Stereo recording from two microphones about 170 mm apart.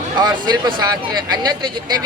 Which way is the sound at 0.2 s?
25° right (ahead or behind).